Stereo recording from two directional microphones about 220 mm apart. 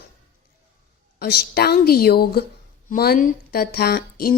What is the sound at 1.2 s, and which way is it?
Speech, 45° left (ahead or behind).